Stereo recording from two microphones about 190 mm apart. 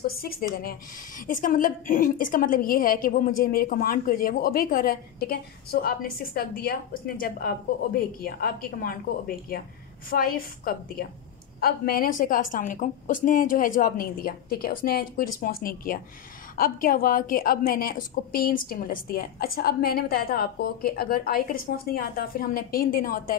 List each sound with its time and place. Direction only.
0.1 s a woman's voice: 50° left (ahead or behind)
10.0 s a woman's voice: 50° left (ahead or behind)